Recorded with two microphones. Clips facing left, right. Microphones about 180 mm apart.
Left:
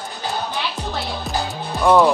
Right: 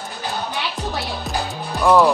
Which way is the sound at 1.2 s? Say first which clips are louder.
Left 1 dB; centre (ahead or behind).